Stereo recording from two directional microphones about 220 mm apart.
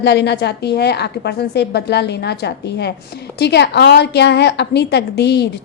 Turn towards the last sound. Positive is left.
turn(degrees=50)  # may be behind; listen again after turning